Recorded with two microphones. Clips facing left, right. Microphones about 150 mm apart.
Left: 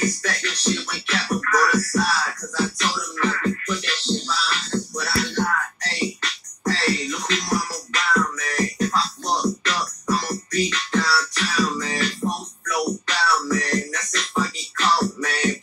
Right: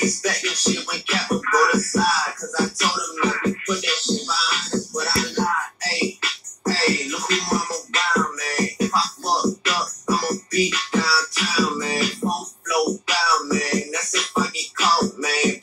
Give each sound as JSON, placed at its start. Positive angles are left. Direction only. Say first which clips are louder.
{"t": 0.0, "sound": "music", "louder": "right 2 dB", "side_deg": -10}
{"t": 7.4, "sound": "music", "louder": "right 1 dB", "side_deg": -25}
{"t": 8.1, "sound": "music", "louder": "left 1 dB", "side_deg": -5}